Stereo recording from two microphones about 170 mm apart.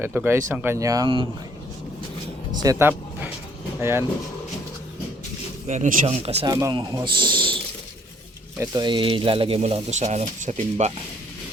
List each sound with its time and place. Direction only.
0.0 s speech: 10° right (ahead or behind)
2.6 s speech: 20° right (ahead or behind)
5.6 s speech: 45° right (ahead or behind)
6.4 s speech: 20° right (ahead or behind); by 10.9 s 40° right (ahead or behind)